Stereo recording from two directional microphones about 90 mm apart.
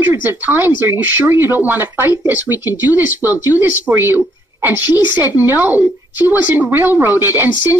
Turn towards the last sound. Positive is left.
turn(degrees=-25)  # may be behind; listen again after turning